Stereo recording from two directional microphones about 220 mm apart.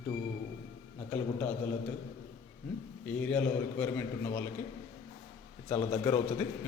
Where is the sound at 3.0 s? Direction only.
5° left (ahead or behind).